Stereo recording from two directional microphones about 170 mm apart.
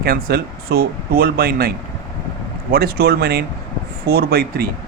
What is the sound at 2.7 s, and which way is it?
Speech, 65° right (ahead or behind).